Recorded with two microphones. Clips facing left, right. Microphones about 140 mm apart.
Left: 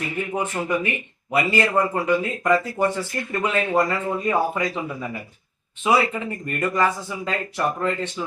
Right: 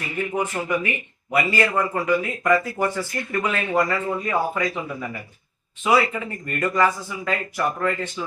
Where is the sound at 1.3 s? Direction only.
20° left (ahead or behind).